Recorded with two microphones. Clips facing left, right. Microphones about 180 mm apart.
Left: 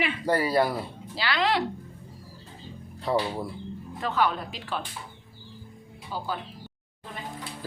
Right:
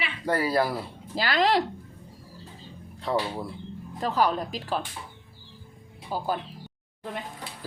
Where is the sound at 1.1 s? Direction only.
45° right (ahead or behind).